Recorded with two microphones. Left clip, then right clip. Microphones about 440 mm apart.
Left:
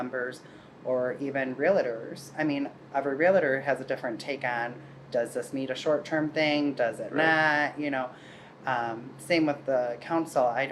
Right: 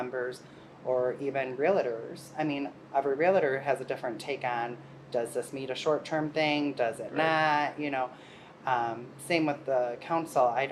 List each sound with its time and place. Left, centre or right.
1.0 s speech: centre